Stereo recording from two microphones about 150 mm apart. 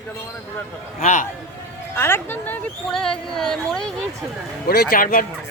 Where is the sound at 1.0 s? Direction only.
55° left (ahead or behind).